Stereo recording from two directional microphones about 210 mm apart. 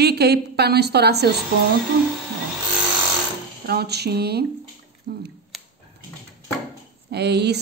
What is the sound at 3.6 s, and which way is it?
A woman's voice, 50° right (ahead or behind).